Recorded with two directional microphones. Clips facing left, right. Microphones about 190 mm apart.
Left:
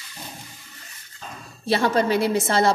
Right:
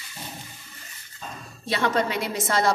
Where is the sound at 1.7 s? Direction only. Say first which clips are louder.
Left 4 dB; 30° left (ahead or behind).